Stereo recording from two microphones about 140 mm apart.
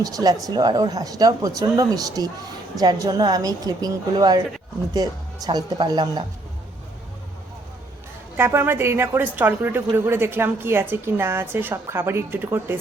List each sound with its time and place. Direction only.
0.0 s speech: 25° right (ahead or behind)
8.4 s a woman's voice: 15° right (ahead or behind)